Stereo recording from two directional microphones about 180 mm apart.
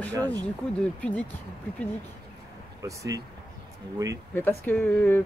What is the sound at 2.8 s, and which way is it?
Speech, 20° right (ahead or behind).